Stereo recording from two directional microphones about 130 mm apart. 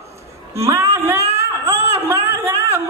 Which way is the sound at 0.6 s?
20° right (ahead or behind).